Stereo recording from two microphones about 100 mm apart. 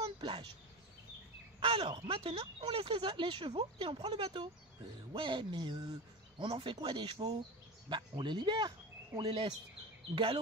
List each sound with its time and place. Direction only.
0.0 s a sound: 55° right (ahead or behind)
1.6 s speech: 60° right (ahead or behind)
6.4 s speech: 60° right (ahead or behind); by 9.4 s 40° right (ahead or behind)
10.1 s speech: 60° right (ahead or behind)